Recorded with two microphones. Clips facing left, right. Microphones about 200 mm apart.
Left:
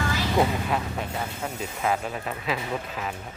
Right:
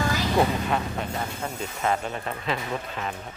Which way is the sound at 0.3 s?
5° left (ahead or behind).